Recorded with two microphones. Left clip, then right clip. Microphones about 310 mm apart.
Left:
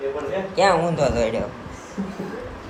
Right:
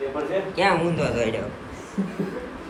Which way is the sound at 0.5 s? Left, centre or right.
Centre.